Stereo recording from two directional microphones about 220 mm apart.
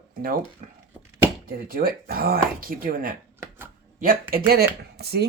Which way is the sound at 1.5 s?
40° right (ahead or behind).